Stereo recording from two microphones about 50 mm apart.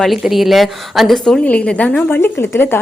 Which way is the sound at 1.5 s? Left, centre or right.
Left.